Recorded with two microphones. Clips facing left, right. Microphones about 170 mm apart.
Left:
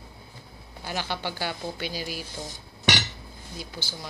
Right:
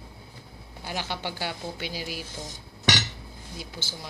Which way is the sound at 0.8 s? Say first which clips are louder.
Left 1 dB; 20° right (ahead or behind).